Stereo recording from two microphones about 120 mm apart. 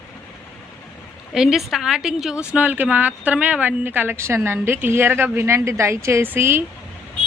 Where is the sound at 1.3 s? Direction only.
Centre (ahead or behind); by 6.6 s 20° right (ahead or behind).